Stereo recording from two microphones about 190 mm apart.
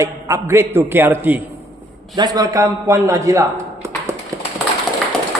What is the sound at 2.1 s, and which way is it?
A man's voice, 20° right (ahead or behind).